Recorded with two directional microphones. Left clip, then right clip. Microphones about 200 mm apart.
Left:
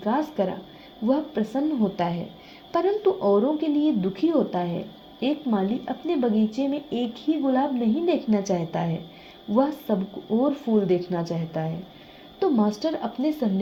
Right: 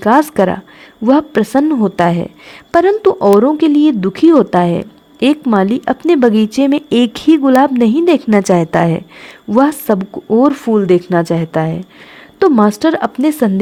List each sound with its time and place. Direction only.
0.0 s a woman's voice: 50° right (ahead or behind)